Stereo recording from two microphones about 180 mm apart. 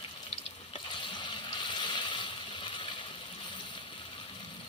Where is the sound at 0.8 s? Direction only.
25° left (ahead or behind).